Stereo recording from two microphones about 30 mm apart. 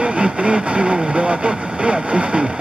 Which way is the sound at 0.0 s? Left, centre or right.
Right.